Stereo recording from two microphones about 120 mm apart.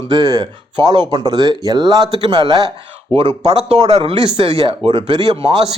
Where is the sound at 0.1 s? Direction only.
35° right (ahead or behind).